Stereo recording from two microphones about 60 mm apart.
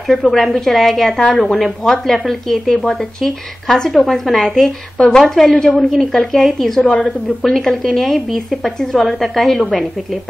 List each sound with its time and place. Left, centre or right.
0.1 s a woman's voice: centre
2.2 s a woman's voice: centre
4.9 s speech: centre
5.2 s a woman's voice: centre
6.8 s a woman's voice: centre
7.4 s a woman's voice: centre